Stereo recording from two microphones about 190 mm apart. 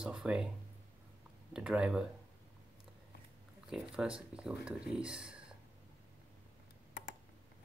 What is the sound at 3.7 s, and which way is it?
Speech, 5° right (ahead or behind).